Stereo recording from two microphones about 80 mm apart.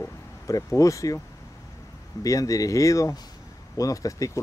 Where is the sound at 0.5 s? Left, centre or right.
Left.